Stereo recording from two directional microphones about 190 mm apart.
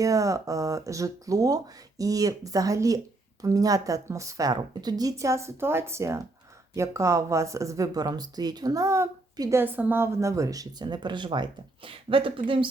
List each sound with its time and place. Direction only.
0.0 s speech: 15° right (ahead or behind)